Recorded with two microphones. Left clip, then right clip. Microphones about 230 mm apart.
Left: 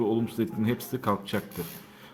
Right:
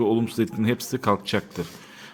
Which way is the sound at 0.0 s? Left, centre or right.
Right.